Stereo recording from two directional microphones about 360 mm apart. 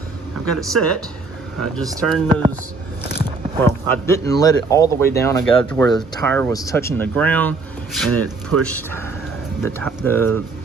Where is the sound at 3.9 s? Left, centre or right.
Centre.